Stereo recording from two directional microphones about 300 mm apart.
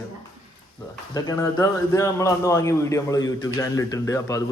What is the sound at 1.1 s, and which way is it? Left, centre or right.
A man's voice, centre.